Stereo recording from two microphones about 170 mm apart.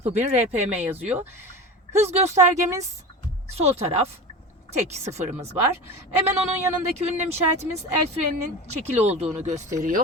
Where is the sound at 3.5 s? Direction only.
40° right (ahead or behind).